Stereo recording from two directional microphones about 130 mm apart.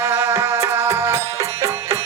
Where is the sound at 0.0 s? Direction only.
20° right (ahead or behind).